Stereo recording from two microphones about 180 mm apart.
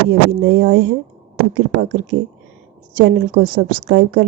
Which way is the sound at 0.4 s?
65° right (ahead or behind).